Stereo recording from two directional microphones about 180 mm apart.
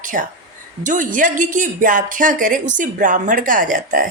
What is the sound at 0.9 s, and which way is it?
Speech, 45° right (ahead or behind).